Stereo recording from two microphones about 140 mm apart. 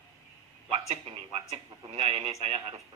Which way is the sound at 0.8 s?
40° right (ahead or behind).